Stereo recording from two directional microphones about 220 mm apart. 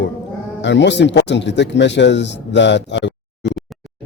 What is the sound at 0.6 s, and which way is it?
Speech, 55° left (ahead or behind).